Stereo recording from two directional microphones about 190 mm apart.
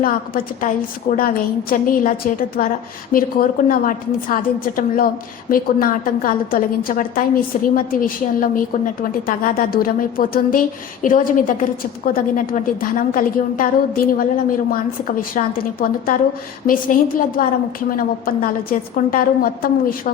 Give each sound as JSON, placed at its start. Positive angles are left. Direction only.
{"t": 0.0, "sound": "a woman's voice", "side_deg": 45}